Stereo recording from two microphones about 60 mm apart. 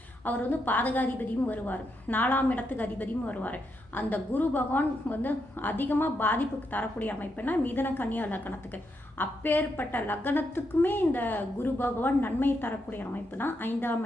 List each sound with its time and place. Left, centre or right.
0.3 s a woman's voice: left